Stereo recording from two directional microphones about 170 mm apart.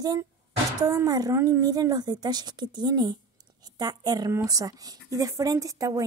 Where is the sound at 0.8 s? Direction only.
20° right (ahead or behind).